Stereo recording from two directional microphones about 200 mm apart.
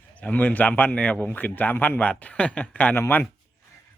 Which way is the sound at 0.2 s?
5° left (ahead or behind).